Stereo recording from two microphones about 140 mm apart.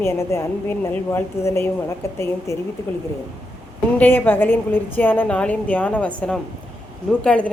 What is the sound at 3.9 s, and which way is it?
A woman's voice, 10° left (ahead or behind).